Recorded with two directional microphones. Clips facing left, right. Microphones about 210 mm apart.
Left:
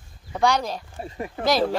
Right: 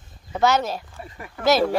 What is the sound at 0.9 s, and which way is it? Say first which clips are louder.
Speech: left 6 dB; 30° left (ahead or behind).